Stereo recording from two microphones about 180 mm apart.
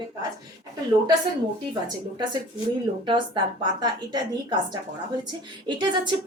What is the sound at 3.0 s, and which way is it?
A woman's voice, 25° right (ahead or behind).